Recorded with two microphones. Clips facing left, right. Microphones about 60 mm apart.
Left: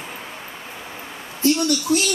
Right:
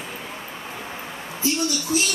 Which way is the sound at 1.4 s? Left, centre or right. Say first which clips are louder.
Left 6 dB; left.